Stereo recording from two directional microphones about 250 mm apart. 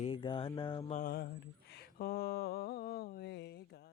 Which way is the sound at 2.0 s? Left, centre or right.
Left.